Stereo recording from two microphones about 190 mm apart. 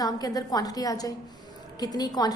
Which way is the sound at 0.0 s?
20° left (ahead or behind).